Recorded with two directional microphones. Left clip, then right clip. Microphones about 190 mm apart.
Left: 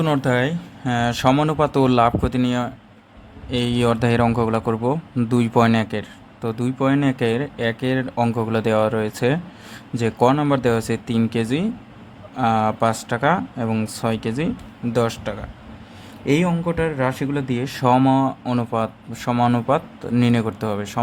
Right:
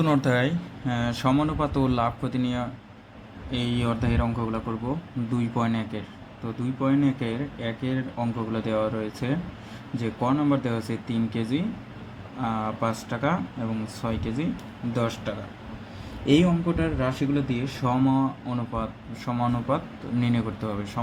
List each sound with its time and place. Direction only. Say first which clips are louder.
0.0 s speech: left 4 dB; 30° left (ahead or behind)
3.5 s speech: left 8 dB; 50° left (ahead or behind)